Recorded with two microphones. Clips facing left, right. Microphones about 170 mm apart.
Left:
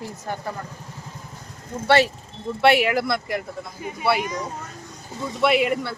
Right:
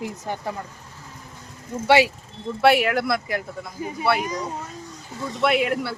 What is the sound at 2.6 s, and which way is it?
Speech, centre (ahead or behind).